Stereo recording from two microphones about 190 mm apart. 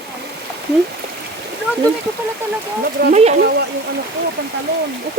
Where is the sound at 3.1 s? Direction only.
35° right (ahead or behind).